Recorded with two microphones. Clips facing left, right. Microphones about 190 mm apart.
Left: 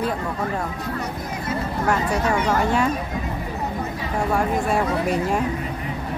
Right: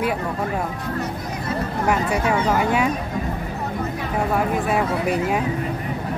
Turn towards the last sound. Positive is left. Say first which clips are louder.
# even
turn(degrees=-5)  # may be behind; listen again after turning